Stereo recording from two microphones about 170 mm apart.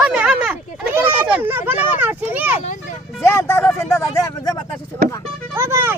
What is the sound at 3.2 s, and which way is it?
Speech, 15° left (ahead or behind).